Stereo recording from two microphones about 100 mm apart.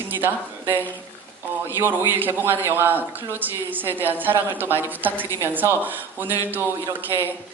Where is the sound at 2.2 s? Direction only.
20° right (ahead or behind).